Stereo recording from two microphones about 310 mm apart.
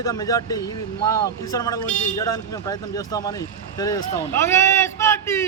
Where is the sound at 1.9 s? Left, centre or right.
Left.